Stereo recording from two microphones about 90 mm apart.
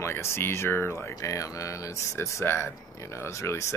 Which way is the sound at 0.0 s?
30° left (ahead or behind).